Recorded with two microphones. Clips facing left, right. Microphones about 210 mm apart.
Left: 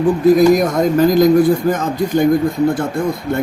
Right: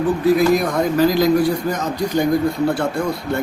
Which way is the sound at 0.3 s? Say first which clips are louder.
Left 5 dB; 45° left (ahead or behind).